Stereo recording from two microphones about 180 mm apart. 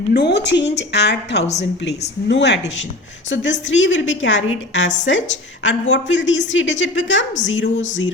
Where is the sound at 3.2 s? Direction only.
90° left.